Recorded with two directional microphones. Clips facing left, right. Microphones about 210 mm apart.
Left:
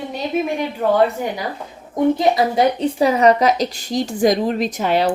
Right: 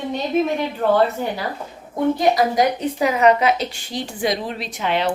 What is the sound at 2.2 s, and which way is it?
A woman's voice, 25° left (ahead or behind).